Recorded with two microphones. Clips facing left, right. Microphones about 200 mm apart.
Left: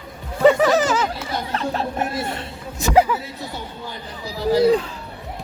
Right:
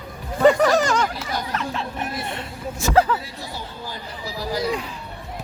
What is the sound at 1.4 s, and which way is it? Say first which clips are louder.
Chuckle: even; 30° left (ahead or behind).